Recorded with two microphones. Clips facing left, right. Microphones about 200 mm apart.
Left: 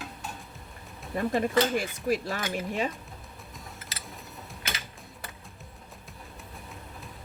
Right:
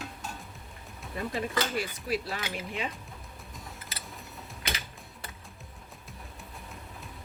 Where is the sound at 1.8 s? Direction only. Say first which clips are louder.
Left 3 dB; 45° left (ahead or behind).